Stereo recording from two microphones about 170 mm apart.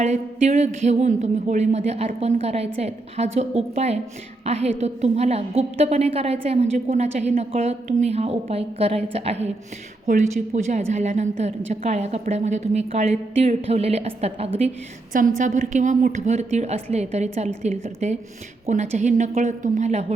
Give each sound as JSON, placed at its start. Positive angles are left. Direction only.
{"t": 0.0, "sound": "a woman's voice", "side_deg": -40}